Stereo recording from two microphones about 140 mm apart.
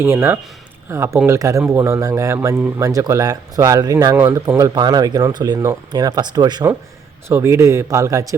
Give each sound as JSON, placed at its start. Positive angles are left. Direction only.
{"t": 0.0, "sound": "speech", "side_deg": -20}
{"t": 7.3, "sound": "speech", "side_deg": -20}